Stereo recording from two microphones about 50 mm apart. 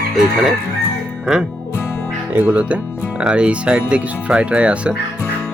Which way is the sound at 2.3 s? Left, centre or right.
Right.